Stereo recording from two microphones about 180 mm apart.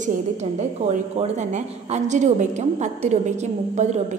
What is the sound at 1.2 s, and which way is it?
A woman's voice, 40° right (ahead or behind).